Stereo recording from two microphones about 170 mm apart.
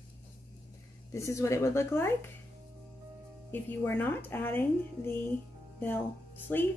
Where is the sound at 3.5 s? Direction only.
10° left (ahead or behind).